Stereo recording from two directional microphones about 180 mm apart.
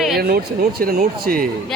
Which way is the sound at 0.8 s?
55° right (ahead or behind).